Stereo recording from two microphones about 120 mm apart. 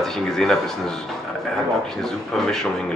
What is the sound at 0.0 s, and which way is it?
Speech, 5° left (ahead or behind).